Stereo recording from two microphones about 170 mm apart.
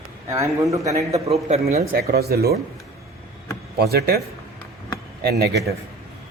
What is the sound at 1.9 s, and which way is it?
Speech, 60° right (ahead or behind).